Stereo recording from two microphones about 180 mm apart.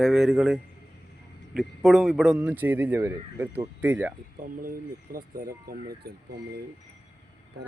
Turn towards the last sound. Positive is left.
turn(degrees=-60)  # may be behind; listen again after turning